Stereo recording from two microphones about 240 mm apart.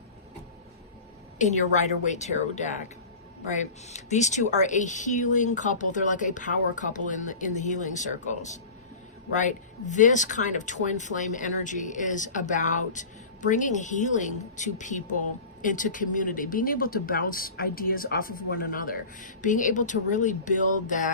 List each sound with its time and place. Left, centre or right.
2.0 s speech: left
3.8 s speech: left